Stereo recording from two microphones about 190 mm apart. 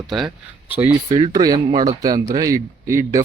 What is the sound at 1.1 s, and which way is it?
A man's voice, 25° right (ahead or behind).